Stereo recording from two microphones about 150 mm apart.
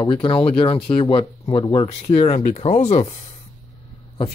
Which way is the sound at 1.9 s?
45° left (ahead or behind).